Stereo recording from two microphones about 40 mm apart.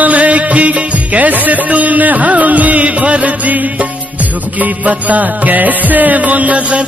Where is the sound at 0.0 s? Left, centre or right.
Right.